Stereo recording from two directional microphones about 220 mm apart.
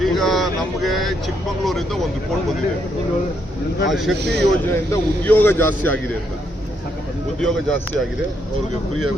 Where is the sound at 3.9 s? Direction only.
Centre (ahead or behind).